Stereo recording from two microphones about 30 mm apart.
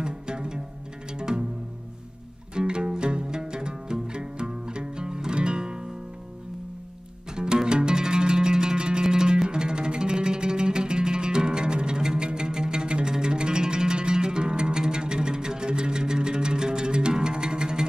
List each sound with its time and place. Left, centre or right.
0.0 s music: right
2.5 s music: right
7.3 s zither: right
9.0 s music: right